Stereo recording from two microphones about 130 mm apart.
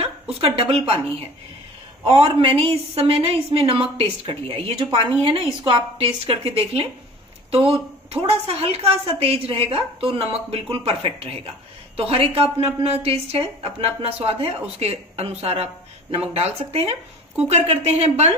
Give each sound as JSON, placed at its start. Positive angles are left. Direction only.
{"t": 0.4, "sound": "a woman's voice", "side_deg": -45}
{"t": 2.2, "sound": "a woman's voice", "side_deg": -45}
{"t": 8.5, "sound": "a woman's voice", "side_deg": -50}